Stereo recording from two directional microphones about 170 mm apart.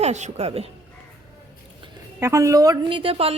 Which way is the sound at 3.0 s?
35° right (ahead or behind).